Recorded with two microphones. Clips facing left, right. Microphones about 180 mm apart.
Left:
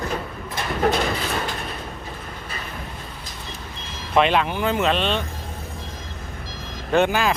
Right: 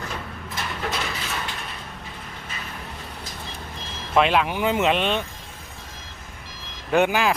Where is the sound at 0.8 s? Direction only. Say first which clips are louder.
Left 11 dB; 45° left (ahead or behind).